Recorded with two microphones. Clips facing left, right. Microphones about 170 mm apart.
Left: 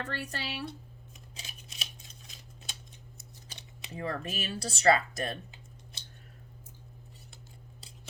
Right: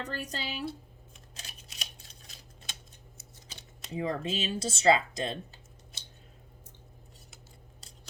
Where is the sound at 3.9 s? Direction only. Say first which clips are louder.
Right 4 dB; 20° right (ahead or behind).